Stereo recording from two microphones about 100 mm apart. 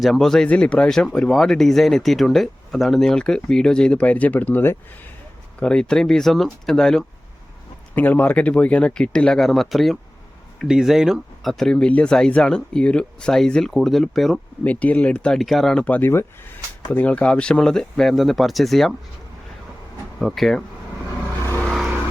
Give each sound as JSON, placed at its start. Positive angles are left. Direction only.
{"t": 0.0, "sound": "speech", "side_deg": 0}
{"t": 5.5, "sound": "speech", "side_deg": 10}
{"t": 7.9, "sound": "speech", "side_deg": 20}
{"t": 14.6, "sound": "speech", "side_deg": 15}
{"t": 15.8, "sound": "speech", "side_deg": 15}
{"t": 20.1, "sound": "speech", "side_deg": 0}
{"t": 21.6, "sound": "vehicle", "side_deg": 0}